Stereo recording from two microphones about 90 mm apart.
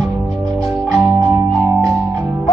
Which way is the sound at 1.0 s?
30° right (ahead or behind).